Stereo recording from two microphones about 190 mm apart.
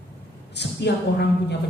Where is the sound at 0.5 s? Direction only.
65° left (ahead or behind).